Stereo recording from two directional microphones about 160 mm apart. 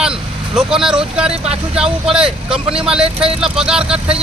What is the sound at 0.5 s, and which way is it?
Speech, 5° right (ahead or behind).